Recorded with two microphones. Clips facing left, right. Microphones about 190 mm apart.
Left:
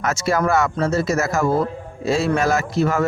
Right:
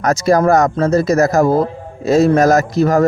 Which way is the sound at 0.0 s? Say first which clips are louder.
Right 7 dB; 40° right (ahead or behind).